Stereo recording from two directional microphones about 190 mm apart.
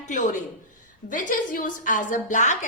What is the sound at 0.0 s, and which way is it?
A woman's voice, 40° left (ahead or behind).